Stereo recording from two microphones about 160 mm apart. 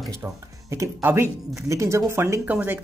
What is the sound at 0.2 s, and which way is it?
Speech, 20° right (ahead or behind).